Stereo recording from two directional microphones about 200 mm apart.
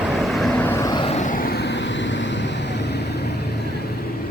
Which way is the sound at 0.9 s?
25° left (ahead or behind).